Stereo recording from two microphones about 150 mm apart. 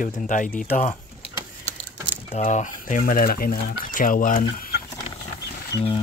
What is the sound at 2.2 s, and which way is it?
Speech, 50° left (ahead or behind).